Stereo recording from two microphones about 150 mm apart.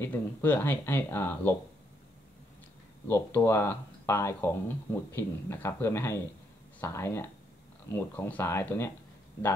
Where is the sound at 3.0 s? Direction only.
15° left (ahead or behind).